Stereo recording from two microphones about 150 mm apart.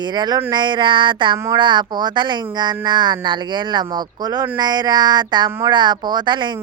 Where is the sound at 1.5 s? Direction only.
30° right (ahead or behind).